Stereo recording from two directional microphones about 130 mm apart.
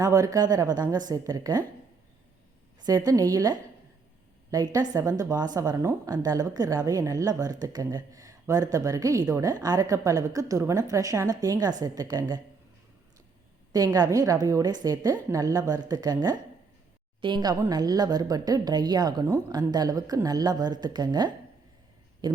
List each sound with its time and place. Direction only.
0.0 s a woman's voice: 25° right (ahead or behind)
2.8 s a woman's voice: 30° right (ahead or behind)
13.7 s a woman's voice: 30° right (ahead or behind)